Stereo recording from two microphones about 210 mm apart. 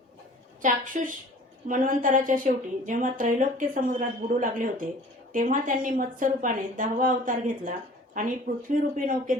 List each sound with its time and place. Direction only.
0.6 s a woman's voice: 40° right (ahead or behind)